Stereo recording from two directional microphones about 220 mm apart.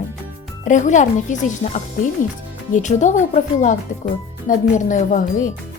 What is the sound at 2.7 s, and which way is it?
Speech, 35° left (ahead or behind).